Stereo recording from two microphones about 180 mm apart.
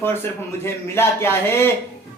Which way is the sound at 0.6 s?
15° left (ahead or behind).